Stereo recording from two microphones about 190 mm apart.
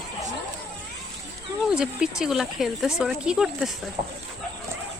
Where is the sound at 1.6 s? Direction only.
5° right (ahead or behind).